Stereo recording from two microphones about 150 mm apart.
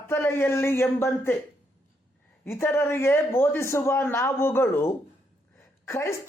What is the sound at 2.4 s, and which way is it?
Speech, 15° left (ahead or behind).